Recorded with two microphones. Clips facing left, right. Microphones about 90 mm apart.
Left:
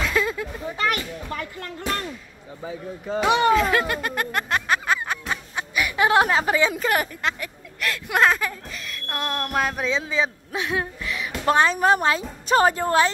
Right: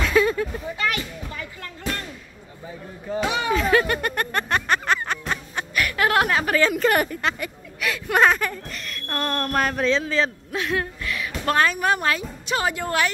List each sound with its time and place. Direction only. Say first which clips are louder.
0.0 s a sound: right 4 dB; centre (ahead or behind)
1.3 s a sound: left 4 dB; 45° left (ahead or behind)
3.1 s speech: left 5 dB; 65° left (ahead or behind)
3.5 s snicker: right 1 dB; centre (ahead or behind)
5.2 s music: right 1 dB; 5° left (ahead or behind)
6.8 s speech: right 3 dB; centre (ahead or behind); by 12.3 s 25° left (ahead or behind)
12.4 s a woman's voice: left 6 dB; 40° left (ahead or behind)